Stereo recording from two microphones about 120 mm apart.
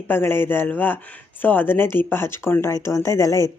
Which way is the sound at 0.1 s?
20° left (ahead or behind).